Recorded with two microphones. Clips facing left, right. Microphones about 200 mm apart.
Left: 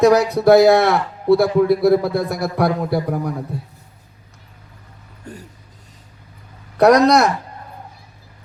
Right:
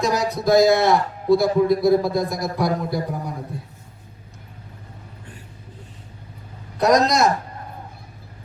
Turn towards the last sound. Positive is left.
turn(degrees=65)  # may be behind; listen again after turning